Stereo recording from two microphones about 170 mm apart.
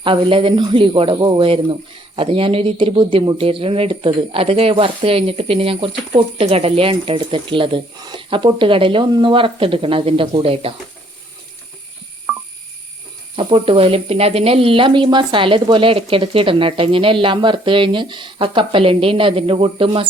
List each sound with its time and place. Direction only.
0.0 s speech: 30° right (ahead or behind)
12.3 s telephone dialing: 5° right (ahead or behind)
13.3 s speech: 30° right (ahead or behind)